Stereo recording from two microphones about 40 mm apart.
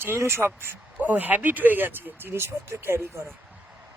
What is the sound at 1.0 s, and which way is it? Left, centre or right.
Speech, right.